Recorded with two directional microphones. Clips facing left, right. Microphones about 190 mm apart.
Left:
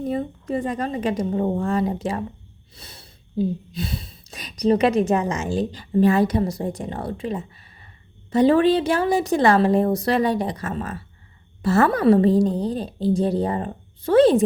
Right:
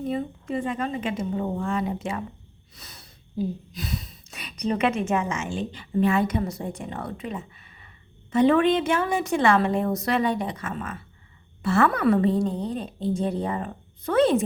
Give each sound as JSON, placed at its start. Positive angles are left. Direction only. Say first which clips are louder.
{"t": 0.0, "sound": "a woman's voice", "louder": "left 3 dB", "side_deg": 40}